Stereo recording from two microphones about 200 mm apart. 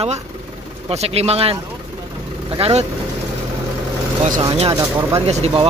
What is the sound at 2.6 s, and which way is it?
Speech, 30° right (ahead or behind).